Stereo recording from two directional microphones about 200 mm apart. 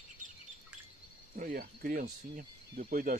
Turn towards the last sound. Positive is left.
turn(degrees=-45)  # may be behind; listen again after turning